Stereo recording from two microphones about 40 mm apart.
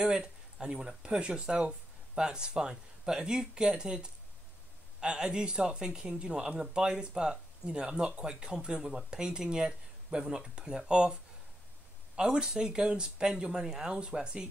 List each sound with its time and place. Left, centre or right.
0.0 s speech: centre
12.2 s speech: right